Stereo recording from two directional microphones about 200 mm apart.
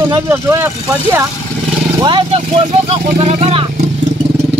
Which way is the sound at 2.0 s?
25° right (ahead or behind).